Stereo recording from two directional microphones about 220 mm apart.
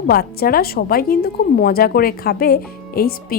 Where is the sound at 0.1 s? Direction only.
45° left (ahead or behind).